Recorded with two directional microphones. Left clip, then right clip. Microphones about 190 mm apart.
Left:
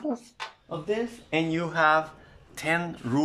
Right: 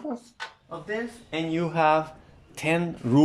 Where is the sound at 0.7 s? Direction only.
15° left (ahead or behind).